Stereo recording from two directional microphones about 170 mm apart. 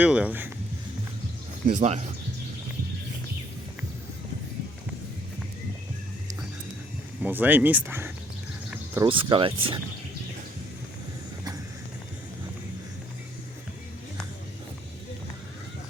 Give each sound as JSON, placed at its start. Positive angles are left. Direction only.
{"t": 0.0, "sound": "speech", "side_deg": -5}
{"t": 1.6, "sound": "speech", "side_deg": -45}
{"t": 7.2, "sound": "speech", "side_deg": -10}
{"t": 9.0, "sound": "speech", "side_deg": -30}